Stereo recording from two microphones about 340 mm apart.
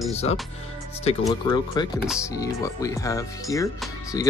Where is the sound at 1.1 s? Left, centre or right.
Centre.